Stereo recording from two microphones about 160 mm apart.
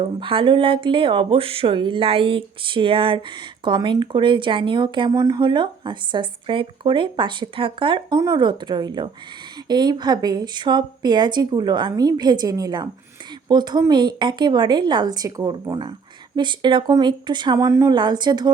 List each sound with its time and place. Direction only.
0.0 s speech: 35° right (ahead or behind)